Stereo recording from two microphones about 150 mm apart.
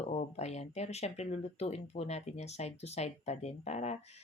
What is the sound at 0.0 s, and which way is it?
Speech, 45° left (ahead or behind).